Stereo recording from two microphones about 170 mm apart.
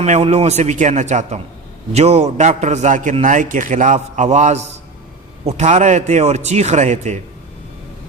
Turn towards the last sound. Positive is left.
turn(degrees=-45)  # may be behind; listen again after turning